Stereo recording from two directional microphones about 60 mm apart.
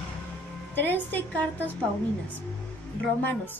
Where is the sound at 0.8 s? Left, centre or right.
Left.